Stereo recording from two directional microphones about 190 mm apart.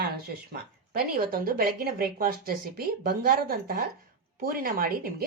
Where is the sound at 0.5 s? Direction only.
50° right (ahead or behind).